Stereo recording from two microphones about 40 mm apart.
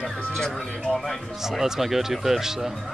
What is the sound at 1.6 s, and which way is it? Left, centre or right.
Speech, centre.